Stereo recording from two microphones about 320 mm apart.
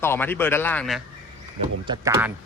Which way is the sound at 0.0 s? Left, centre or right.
Centre.